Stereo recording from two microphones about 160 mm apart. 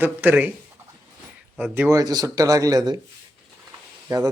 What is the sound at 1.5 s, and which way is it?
A man's voice, 10° right (ahead or behind).